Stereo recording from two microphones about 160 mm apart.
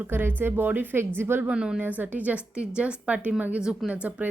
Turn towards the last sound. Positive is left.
turn(degrees=-10)  # may be behind; listen again after turning